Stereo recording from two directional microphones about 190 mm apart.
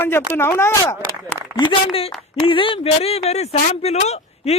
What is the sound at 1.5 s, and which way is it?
A man's voice, 25° left (ahead or behind).